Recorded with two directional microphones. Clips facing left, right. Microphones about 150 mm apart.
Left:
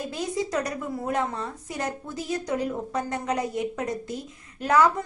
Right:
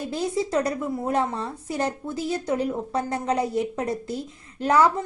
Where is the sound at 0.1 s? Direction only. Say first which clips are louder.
Right 5 dB; 30° right (ahead or behind).